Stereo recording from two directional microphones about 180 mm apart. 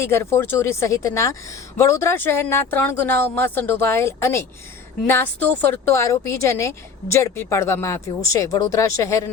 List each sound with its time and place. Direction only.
0.0 s speech: 15° left (ahead or behind)